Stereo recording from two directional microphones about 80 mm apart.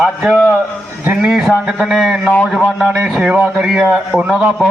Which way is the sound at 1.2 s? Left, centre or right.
Centre.